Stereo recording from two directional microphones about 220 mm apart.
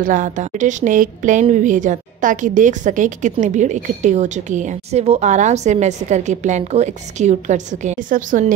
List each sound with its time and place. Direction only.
0.0 s a woman's voice: 35° right (ahead or behind)